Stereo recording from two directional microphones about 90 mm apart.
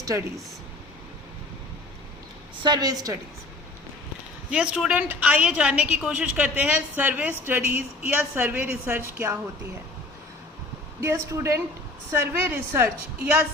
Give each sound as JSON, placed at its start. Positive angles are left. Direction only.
{"t": 0.0, "sound": "a woman's voice", "side_deg": -35}
{"t": 2.6, "sound": "a woman's voice", "side_deg": -45}
{"t": 4.5, "sound": "a woman's voice", "side_deg": -10}
{"t": 11.0, "sound": "a woman's voice", "side_deg": -30}
{"t": 12.1, "sound": "a woman's voice", "side_deg": -25}